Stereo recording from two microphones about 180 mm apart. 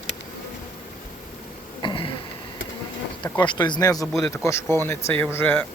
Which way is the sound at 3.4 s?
25° left (ahead or behind).